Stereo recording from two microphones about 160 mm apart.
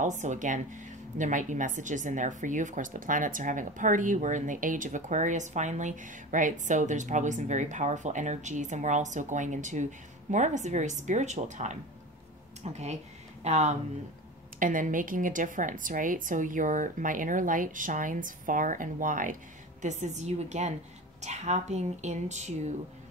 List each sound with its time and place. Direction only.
0.0 s speech: 50° right (ahead or behind)
14.6 s a woman's voice: 55° right (ahead or behind)